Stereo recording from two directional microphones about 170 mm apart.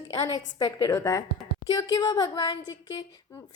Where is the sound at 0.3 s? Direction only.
25° left (ahead or behind).